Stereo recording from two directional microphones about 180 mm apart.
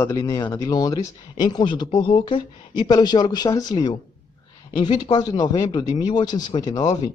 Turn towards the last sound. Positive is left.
turn(degrees=20)  # may be behind; listen again after turning